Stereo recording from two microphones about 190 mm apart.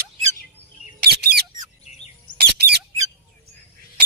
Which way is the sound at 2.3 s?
70° right (ahead or behind).